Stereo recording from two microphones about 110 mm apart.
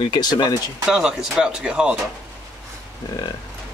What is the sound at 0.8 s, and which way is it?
Speech, 5° right (ahead or behind).